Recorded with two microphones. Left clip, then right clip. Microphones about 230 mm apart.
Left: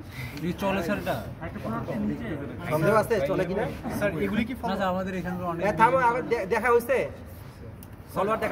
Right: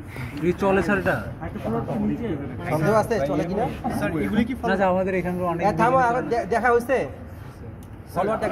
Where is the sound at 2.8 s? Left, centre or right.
Left.